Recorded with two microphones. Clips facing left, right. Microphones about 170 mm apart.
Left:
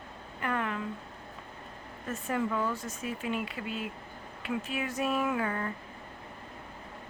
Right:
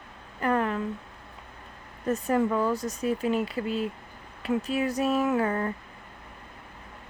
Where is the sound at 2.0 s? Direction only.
40° right (ahead or behind).